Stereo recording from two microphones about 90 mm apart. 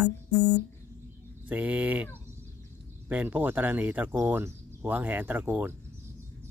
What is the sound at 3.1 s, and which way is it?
Speech, 20° right (ahead or behind).